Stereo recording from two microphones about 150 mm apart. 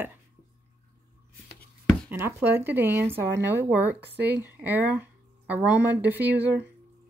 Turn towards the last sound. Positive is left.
turn(degrees=-10)  # may be behind; listen again after turning